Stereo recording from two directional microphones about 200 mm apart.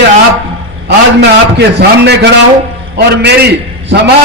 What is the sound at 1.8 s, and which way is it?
A man's voice, 55° right (ahead or behind).